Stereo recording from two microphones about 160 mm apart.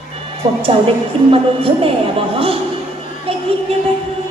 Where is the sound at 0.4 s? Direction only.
20° right (ahead or behind).